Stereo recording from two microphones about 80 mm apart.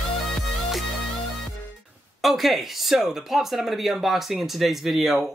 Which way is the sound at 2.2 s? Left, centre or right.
Centre.